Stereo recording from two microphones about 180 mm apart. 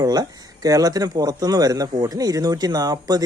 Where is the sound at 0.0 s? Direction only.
20° right (ahead or behind).